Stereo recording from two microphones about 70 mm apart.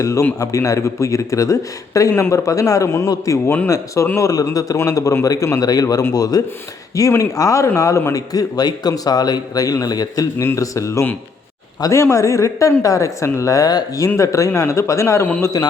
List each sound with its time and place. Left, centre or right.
0.0 s speech: left
3.4 s speech: left
3.7 s speech: left
4.2 s a man's voice: left
8.1 s a man's voice: left
10.3 s speech: left
14.2 s speech: left
15.6 s a man's voice: left